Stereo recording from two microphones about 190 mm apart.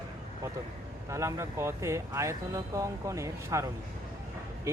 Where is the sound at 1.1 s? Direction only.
15° right (ahead or behind).